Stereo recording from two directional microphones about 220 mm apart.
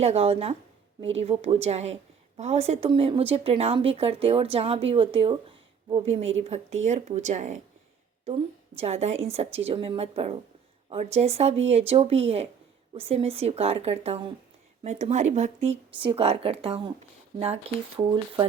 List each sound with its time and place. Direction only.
0.0 s a woman's voice: 30° right (ahead or behind)